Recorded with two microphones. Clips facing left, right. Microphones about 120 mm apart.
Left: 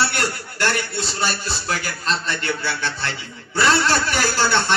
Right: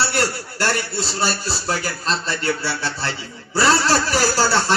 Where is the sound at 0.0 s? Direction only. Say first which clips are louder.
Right 1 dB; 35° right (ahead or behind).